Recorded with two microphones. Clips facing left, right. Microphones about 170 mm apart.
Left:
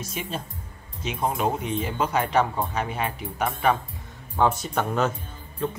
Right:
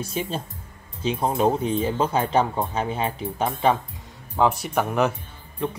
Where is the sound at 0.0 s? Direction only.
30° right (ahead or behind).